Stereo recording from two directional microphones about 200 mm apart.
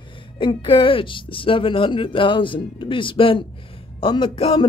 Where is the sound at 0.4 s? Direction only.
25° left (ahead or behind).